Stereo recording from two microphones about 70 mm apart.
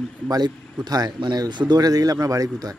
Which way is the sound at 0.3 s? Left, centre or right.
Right.